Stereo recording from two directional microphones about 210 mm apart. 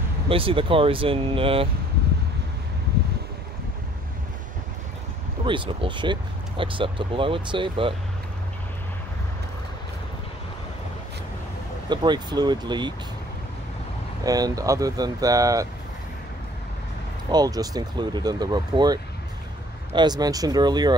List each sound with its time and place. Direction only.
0.3 s speech: 25° right (ahead or behind)
5.4 s speech: 25° right (ahead or behind)
11.9 s speech: 20° right (ahead or behind)
14.2 s speech: 15° right (ahead or behind)
17.3 s speech: 20° right (ahead or behind)